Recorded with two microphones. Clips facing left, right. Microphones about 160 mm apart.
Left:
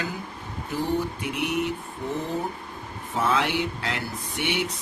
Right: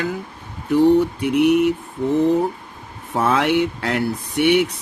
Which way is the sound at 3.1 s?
60° right (ahead or behind).